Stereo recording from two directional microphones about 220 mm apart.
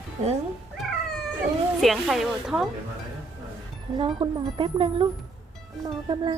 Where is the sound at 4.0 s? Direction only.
20° right (ahead or behind).